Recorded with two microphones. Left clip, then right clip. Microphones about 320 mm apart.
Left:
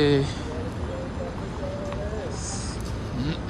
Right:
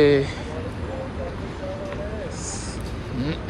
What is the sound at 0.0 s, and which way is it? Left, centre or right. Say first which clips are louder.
Speech: right 5 dB; centre.